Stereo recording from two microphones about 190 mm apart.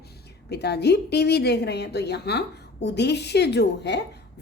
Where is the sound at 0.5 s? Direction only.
60° left (ahead or behind).